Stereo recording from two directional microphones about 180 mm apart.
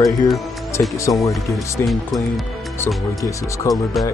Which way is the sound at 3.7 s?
15° left (ahead or behind).